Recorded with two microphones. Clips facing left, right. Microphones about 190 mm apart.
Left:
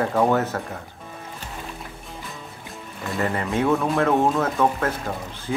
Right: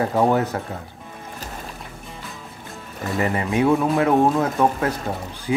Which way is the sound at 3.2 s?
10° right (ahead or behind).